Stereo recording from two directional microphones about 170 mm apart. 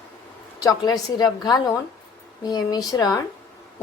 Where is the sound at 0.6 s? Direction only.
20° left (ahead or behind).